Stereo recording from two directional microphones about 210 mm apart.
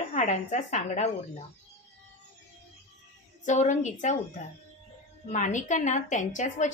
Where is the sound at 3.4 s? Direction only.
35° left (ahead or behind).